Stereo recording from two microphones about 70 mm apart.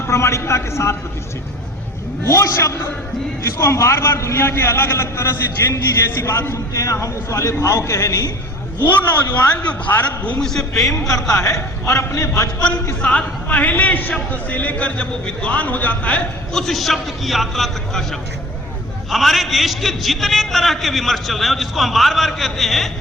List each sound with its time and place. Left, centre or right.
0.1 s a man's voice: left
2.2 s a man's voice: left
9.3 s a man's voice: left
10.4 s a man's voice: centre
11.1 s a man's voice: left
12.5 s a man's voice: centre
16.6 s a man's voice: centre
19.1 s a man's voice: centre